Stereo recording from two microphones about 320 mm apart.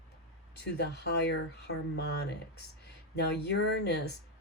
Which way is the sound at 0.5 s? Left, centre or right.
Left.